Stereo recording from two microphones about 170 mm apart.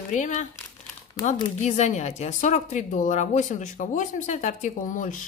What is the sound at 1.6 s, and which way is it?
A woman's voice, 40° left (ahead or behind).